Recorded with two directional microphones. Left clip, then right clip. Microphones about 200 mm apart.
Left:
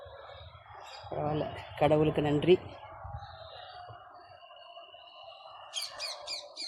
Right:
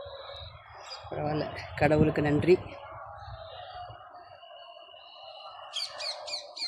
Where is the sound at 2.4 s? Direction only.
5° right (ahead or behind).